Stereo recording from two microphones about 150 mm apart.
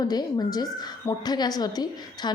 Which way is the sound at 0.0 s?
25° left (ahead or behind).